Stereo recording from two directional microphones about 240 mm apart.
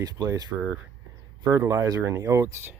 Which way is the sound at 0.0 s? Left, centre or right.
Centre.